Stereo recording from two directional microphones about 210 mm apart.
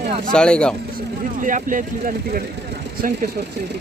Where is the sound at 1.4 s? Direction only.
40° right (ahead or behind).